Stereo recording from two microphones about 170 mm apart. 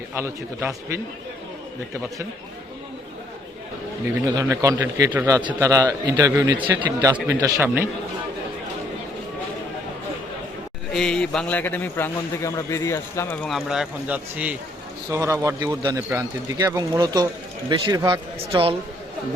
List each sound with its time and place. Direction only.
0.1 s speech: 15° right (ahead or behind)
4.4 s speech: 15° right (ahead or behind)
10.9 s a man's voice: 5° left (ahead or behind)
13.5 s a man's voice: centre (ahead or behind)
15.1 s speech: 20° right (ahead or behind)